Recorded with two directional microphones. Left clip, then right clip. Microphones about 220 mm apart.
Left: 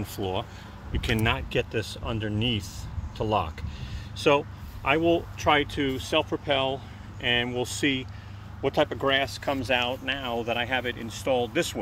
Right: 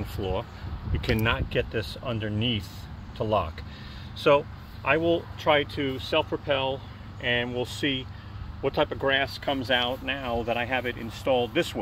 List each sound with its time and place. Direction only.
0.2 s speech: 25° left (ahead or behind); by 11.8 s centre (ahead or behind)